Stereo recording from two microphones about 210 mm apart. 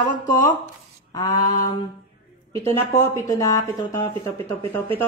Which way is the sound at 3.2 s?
15° left (ahead or behind).